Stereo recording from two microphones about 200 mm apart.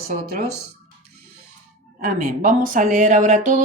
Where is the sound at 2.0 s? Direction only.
45° right (ahead or behind).